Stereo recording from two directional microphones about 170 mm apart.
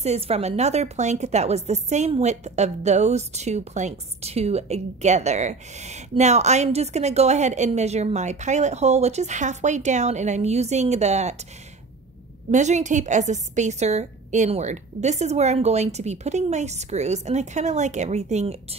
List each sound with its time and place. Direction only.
0.0 s a woman's voice: 40° right (ahead or behind)
12.4 s a woman's voice: 45° right (ahead or behind)